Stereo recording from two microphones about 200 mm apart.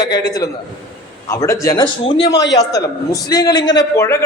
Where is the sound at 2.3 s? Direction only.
60° left (ahead or behind).